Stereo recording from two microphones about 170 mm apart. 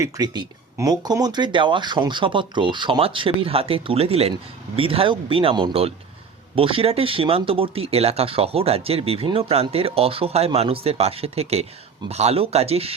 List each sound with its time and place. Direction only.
0.0 s speech: 20° right (ahead or behind); by 12.9 s 35° right (ahead or behind)